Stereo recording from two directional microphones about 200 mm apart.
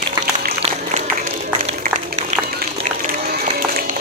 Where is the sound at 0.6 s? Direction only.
35° right (ahead or behind).